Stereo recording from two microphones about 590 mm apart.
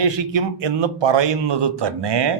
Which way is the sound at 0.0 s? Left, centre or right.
Right.